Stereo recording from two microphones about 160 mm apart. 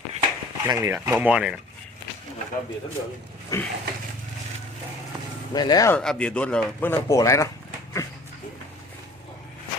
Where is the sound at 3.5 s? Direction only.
20° left (ahead or behind).